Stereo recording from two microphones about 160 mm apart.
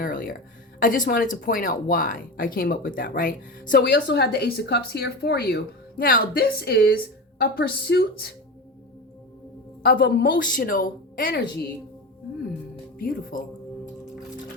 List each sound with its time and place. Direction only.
0.0 s speech: 60° left (ahead or behind); by 8.3 s 85° left
9.8 s speech: 70° left (ahead or behind)
13.0 s speech: 65° left (ahead or behind)